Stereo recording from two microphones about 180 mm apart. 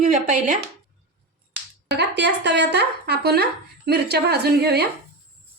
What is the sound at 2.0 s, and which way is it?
A woman's voice, 75° right (ahead or behind).